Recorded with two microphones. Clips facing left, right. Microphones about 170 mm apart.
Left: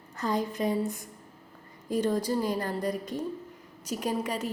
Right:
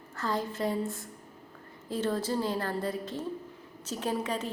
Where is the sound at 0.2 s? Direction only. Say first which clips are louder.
Left 2 dB; 20° left (ahead or behind).